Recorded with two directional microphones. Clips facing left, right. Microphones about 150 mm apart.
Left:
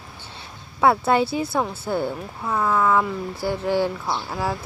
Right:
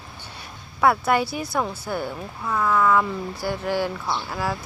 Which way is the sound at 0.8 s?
20° left (ahead or behind).